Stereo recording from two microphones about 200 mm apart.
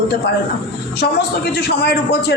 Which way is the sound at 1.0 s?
55° left (ahead or behind).